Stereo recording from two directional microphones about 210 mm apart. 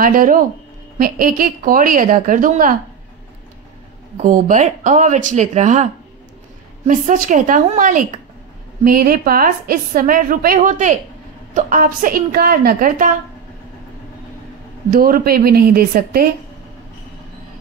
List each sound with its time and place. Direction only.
0.0 s a woman's voice: 40° right (ahead or behind)
4.2 s a woman's voice: 35° right (ahead or behind)
6.9 s a woman's voice: 40° right (ahead or behind)
14.9 s a woman's voice: 40° right (ahead or behind)